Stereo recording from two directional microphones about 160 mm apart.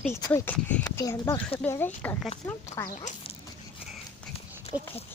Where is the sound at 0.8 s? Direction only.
25° left (ahead or behind).